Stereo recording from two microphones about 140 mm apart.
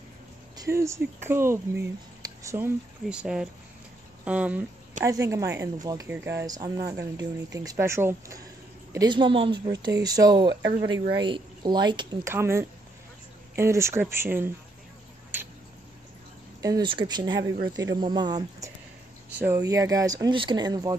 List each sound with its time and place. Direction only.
0.6 s speech: 20° right (ahead or behind)
2.2 s a sound: 20° right (ahead or behind)
3.1 s speech: 5° right (ahead or behind)
5.0 s speech: 20° right (ahead or behind)
8.9 s speech: 30° right (ahead or behind)
12.3 s speech: 20° right (ahead or behind)
16.6 s speech: 30° right (ahead or behind)
19.3 s speech: 15° right (ahead or behind)